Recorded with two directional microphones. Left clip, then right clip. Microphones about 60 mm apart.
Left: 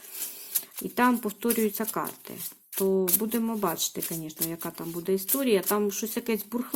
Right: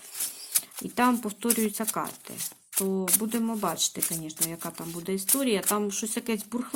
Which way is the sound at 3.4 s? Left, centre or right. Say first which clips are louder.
Even; centre.